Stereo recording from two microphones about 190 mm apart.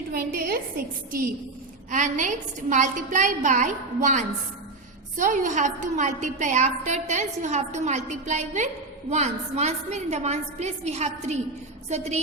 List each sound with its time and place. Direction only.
0.1 s a woman's voice: 50° right (ahead or behind)
1.9 s a woman's voice: 40° right (ahead or behind)